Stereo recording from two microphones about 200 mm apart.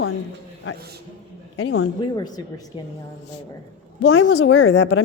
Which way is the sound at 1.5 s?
80° left.